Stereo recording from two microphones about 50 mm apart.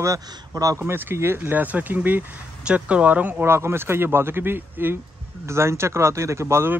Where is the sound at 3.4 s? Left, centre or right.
Right.